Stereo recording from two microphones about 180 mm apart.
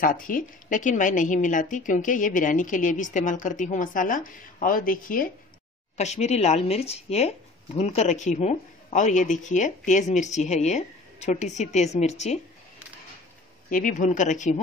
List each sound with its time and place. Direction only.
0.0 s a woman's voice: 50° left (ahead or behind)
5.9 s speech: 40° left (ahead or behind)
13.7 s a woman's voice: 50° left (ahead or behind)